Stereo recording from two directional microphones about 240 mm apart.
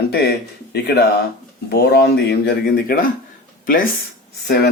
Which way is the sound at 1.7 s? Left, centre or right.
Left.